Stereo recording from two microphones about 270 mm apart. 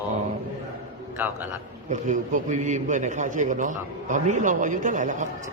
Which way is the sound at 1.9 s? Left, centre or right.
Right.